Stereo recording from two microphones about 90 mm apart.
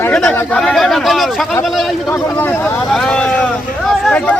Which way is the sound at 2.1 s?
25° left (ahead or behind).